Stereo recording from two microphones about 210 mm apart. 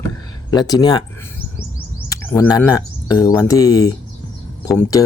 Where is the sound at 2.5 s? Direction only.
15° left (ahead or behind).